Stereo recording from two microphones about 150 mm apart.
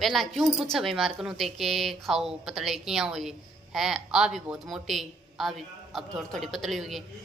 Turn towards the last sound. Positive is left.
turn(degrees=0)  # may be behind; listen again after turning